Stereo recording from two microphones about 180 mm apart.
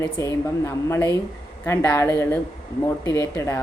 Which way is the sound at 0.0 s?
15° left (ahead or behind).